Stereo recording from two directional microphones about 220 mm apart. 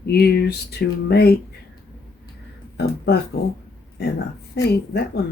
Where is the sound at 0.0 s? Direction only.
45° left (ahead or behind).